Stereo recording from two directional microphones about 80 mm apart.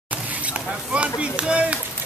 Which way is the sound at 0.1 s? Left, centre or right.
Centre.